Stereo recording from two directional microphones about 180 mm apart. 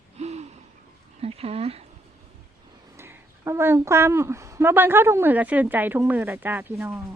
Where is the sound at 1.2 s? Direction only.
35° right (ahead or behind).